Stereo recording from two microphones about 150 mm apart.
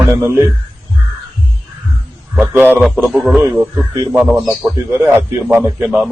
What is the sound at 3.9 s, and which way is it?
Speech, 20° right (ahead or behind).